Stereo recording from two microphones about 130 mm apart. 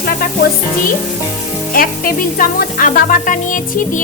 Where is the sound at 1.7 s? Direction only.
90° left.